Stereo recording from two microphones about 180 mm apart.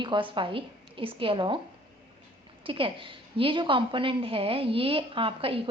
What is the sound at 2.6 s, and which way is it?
A woman's voice, 30° right (ahead or behind).